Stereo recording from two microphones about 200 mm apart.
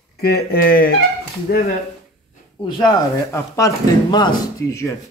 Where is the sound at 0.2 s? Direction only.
50° left (ahead or behind).